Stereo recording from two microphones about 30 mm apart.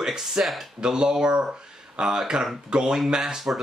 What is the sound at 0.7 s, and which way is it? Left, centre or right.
Speech, right.